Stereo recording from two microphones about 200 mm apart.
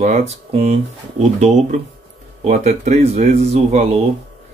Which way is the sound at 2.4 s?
35° right (ahead or behind).